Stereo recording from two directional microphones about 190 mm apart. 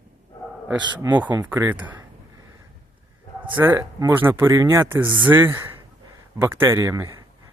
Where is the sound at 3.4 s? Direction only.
10° right (ahead or behind).